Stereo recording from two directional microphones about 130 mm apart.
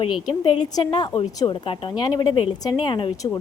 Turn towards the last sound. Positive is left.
turn(degrees=40)  # may be behind; listen again after turning